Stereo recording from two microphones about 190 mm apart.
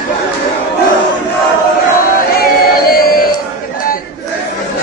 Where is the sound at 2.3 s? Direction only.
50° left (ahead or behind).